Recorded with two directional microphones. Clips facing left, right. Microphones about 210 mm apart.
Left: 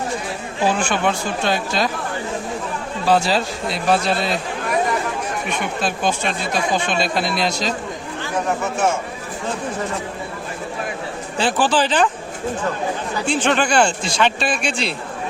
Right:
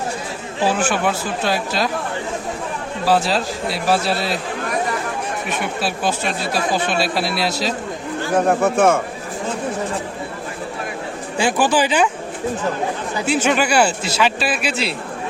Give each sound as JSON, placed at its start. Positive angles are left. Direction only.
{"t": 0.7, "sound": "speech", "side_deg": -5}
{"t": 3.1, "sound": "speech", "side_deg": 0}
{"t": 5.5, "sound": "speech", "side_deg": -5}
{"t": 8.4, "sound": "speech", "side_deg": -55}
{"t": 11.3, "sound": "speech", "side_deg": -10}
{"t": 13.2, "sound": "speech", "side_deg": -5}